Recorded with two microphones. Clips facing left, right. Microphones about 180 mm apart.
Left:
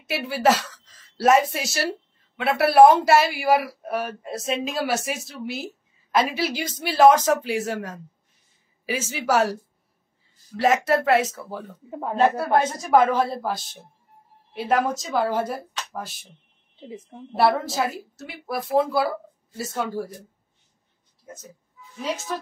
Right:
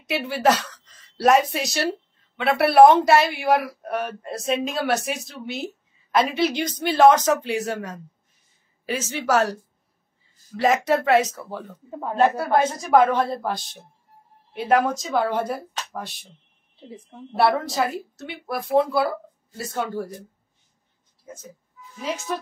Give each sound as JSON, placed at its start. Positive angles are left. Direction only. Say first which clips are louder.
{"t": 0.0, "sound": "a woman's voice", "louder": "even", "side_deg": 0}
{"t": 10.5, "sound": "a woman's voice", "louder": "even", "side_deg": 0}
{"t": 17.3, "sound": "a woman's voice", "louder": "even", "side_deg": 0}